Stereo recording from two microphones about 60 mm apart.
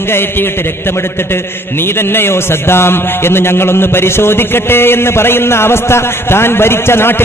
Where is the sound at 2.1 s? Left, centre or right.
Left.